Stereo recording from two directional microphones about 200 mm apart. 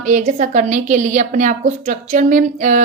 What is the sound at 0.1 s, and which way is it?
A woman's voice, 40° right (ahead or behind).